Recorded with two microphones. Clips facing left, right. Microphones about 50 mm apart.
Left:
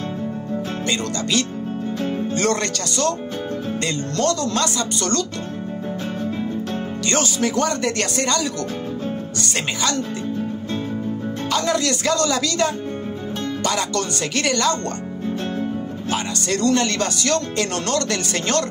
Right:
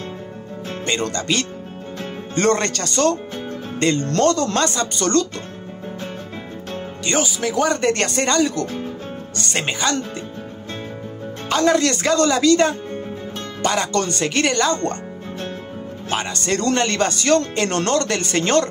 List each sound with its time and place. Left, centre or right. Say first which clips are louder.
0.8 s speech: right 4 dB; right
7.1 s speech: even; centre
7.8 s speech: right 3 dB; right
11.5 s speech: right 5 dB; right
16.1 s speech: right 1 dB; right